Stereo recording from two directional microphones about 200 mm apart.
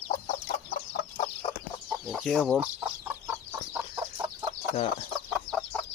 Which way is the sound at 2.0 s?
Centre (ahead or behind).